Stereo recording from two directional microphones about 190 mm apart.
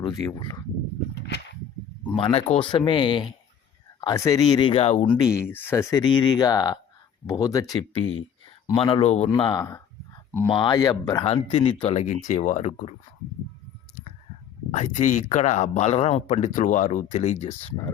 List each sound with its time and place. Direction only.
0.0 s speech: 20° left (ahead or behind)
2.1 s speech: 30° left (ahead or behind)
5.3 s speech: 10° left (ahead or behind); by 9.3 s 35° left (ahead or behind)
9.3 s speech: 20° left (ahead or behind); by 12.9 s 35° left (ahead or behind)
14.7 s speech: 40° left (ahead or behind)